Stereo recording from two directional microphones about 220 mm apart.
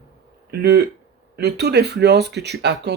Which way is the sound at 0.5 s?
50° right (ahead or behind).